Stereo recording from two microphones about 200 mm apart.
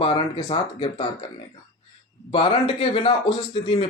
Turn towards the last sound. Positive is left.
turn(degrees=25)  # may be behind; listen again after turning